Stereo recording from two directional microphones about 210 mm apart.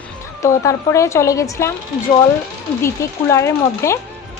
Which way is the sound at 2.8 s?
15° left (ahead or behind).